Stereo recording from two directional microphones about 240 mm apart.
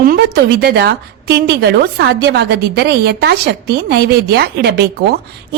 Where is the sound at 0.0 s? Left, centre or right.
Right.